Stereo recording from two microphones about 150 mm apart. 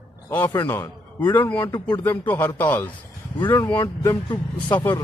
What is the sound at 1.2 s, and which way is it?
Speech, 30° left (ahead or behind).